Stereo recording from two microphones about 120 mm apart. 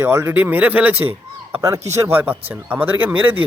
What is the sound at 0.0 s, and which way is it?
Speech, 20° right (ahead or behind).